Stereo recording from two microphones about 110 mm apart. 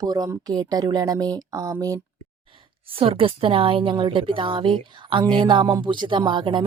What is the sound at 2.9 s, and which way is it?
Speech, 55° right (ahead or behind).